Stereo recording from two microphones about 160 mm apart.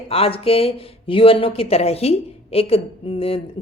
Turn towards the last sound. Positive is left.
turn(degrees=35)  # may be behind; listen again after turning